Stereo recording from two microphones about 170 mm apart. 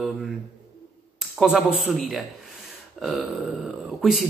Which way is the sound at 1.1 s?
Centre (ahead or behind).